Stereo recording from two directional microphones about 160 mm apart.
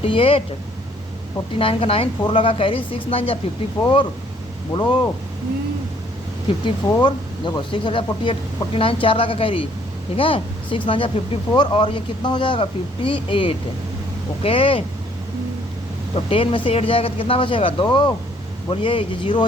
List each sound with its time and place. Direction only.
0.0 s speech: 35° left (ahead or behind)
1.5 s speech: 35° left (ahead or behind)
6.8 s speech: 25° left (ahead or behind)
16.1 s speech: 35° left (ahead or behind)